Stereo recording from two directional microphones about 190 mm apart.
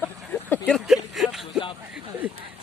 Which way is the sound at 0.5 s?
5° left (ahead or behind).